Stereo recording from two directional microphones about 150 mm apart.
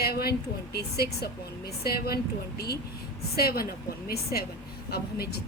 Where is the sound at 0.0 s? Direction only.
90° left.